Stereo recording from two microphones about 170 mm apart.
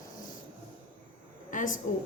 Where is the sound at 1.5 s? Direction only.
50° left (ahead or behind).